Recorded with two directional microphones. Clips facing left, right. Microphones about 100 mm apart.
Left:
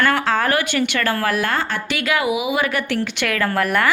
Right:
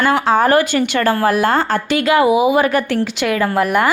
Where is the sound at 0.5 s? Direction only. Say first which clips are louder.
Right 6 dB; 35° right (ahead or behind).